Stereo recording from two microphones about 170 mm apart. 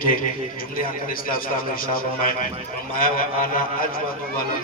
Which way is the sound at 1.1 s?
55° left (ahead or behind).